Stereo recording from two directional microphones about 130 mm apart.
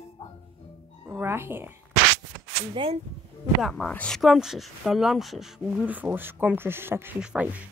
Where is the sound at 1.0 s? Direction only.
15° right (ahead or behind).